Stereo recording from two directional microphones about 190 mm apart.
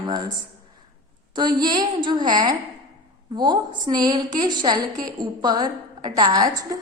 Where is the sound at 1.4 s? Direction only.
20° right (ahead or behind).